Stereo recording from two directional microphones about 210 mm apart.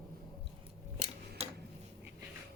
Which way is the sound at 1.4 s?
30° right (ahead or behind).